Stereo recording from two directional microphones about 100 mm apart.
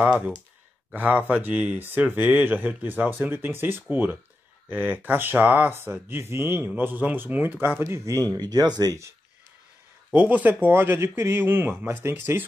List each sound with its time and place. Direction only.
0.9 s speech: 15° right (ahead or behind)
8.3 s speech: 45° right (ahead or behind)
10.1 s speech: 15° right (ahead or behind)